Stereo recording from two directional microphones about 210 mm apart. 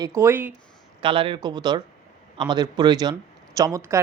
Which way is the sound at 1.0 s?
25° right (ahead or behind).